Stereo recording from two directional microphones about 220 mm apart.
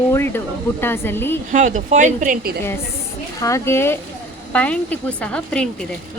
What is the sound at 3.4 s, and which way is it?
A woman's voice, 15° left (ahead or behind).